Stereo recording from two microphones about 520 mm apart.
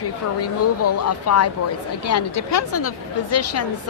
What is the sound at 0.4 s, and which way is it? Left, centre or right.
A woman's voice, left.